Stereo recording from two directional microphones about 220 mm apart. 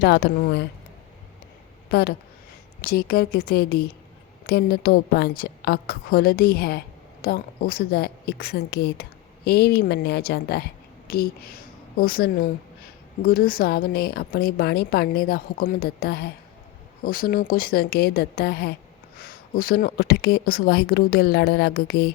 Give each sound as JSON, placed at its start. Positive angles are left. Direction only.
{"t": 0.0, "sound": "a woman's voice", "side_deg": 45}
{"t": 1.9, "sound": "a woman's voice", "side_deg": 45}